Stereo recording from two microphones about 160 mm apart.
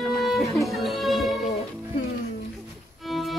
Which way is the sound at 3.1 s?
Centre (ahead or behind).